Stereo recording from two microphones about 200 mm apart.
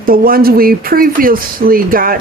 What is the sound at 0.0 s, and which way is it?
Speech, 45° right (ahead or behind).